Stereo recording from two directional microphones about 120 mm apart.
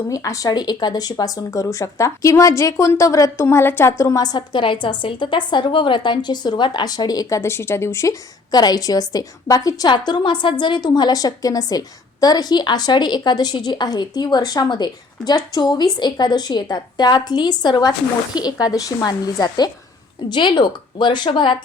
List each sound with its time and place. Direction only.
0.1 s speech: 30° left (ahead or behind)